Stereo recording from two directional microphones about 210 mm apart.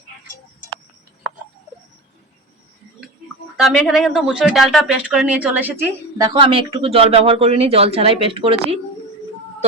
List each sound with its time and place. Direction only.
3.6 s speech: centre (ahead or behind)
6.2 s speech: 25° right (ahead or behind)